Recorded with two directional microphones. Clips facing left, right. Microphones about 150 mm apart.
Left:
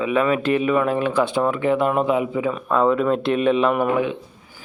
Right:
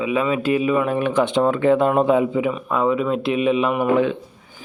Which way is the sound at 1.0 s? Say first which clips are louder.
Right 2 dB; 15° right (ahead or behind).